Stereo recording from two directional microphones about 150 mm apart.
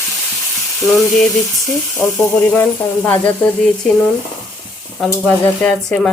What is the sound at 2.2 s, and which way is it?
Speech, 15° left (ahead or behind).